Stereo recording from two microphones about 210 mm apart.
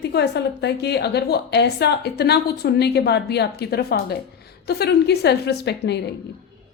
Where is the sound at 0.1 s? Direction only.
55° left (ahead or behind).